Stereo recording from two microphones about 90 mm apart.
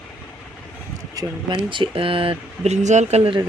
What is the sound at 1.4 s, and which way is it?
Speech, 65° right (ahead or behind).